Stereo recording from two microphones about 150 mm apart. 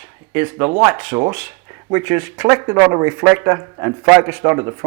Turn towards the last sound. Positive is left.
turn(degrees=-15)  # may be behind; listen again after turning